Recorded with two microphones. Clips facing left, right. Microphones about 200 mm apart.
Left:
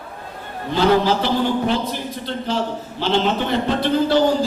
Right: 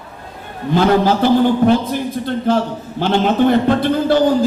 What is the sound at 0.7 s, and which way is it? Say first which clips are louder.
A man's voice: right 3 dB; 50° right (ahead or behind).